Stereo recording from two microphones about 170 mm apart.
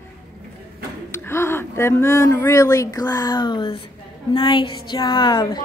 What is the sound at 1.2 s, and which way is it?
Speech, 15° left (ahead or behind).